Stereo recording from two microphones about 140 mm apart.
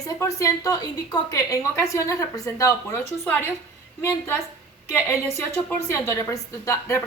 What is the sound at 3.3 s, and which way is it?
Speech, 15° left (ahead or behind).